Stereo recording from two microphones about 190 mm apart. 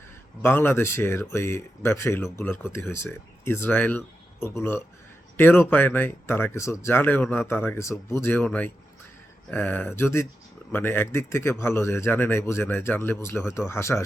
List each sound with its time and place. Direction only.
0.4 s speech: 10° left (ahead or behind)